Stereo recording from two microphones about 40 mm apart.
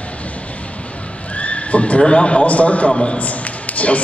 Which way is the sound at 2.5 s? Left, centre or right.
Left.